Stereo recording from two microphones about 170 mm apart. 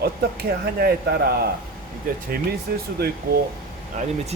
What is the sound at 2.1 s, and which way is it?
Speech, 55° right (ahead or behind).